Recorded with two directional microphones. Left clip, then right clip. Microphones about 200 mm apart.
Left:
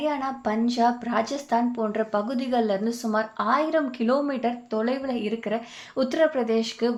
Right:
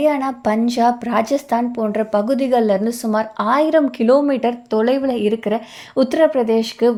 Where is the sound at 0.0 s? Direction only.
40° right (ahead or behind).